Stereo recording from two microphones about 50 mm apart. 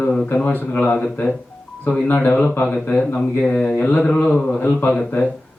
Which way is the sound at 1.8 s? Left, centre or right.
Left.